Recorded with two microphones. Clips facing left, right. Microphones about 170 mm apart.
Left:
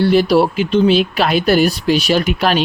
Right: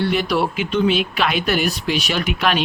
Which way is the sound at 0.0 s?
35° left (ahead or behind).